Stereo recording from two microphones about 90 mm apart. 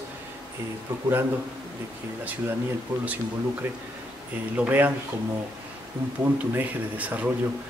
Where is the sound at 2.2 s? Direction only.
20° right (ahead or behind).